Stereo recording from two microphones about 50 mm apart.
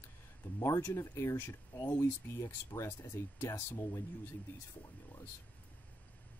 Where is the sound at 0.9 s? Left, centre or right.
Left.